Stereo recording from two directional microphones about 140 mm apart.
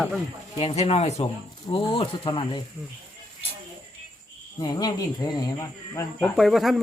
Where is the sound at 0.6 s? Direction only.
45° left (ahead or behind).